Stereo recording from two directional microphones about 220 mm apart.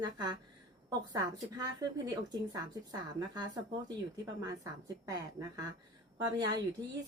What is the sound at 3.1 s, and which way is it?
Speech, 15° right (ahead or behind).